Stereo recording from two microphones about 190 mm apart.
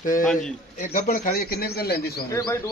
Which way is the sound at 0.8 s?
45° left (ahead or behind).